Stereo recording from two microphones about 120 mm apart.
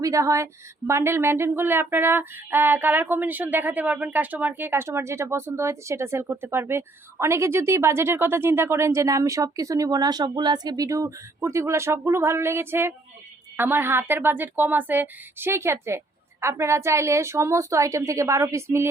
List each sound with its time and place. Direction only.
0.0 s a woman's voice: 25° right (ahead or behind)